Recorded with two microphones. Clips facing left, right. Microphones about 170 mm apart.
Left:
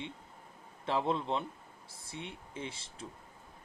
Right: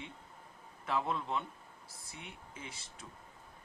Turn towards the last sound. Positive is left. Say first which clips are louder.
# left 7 dB
turn(degrees=30)  # may be behind; listen again after turning